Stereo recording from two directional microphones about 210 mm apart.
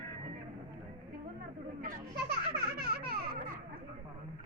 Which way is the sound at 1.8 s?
50° right (ahead or behind).